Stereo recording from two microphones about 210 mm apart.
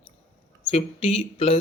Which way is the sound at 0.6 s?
30° left (ahead or behind).